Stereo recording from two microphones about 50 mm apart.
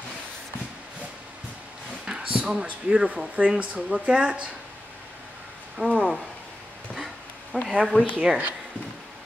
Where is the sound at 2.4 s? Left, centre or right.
Right.